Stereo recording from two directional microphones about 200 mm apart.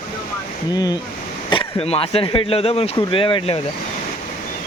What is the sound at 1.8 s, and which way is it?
Speech, 30° left (ahead or behind).